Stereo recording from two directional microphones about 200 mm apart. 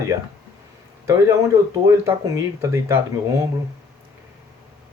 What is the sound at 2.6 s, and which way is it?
Speech, 15° right (ahead or behind).